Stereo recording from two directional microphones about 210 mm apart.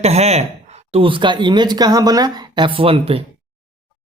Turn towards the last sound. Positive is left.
turn(degrees=-25)  # may be behind; listen again after turning